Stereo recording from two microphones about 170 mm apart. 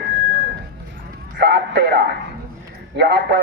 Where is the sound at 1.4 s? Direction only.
80° right.